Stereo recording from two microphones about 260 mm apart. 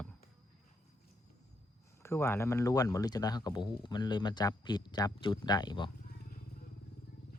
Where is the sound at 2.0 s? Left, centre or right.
Centre.